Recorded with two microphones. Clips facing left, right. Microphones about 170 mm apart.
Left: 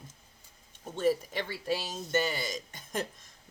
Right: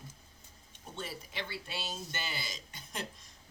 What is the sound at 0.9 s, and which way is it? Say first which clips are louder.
Speech: left 14 dB; 45° left (ahead or behind).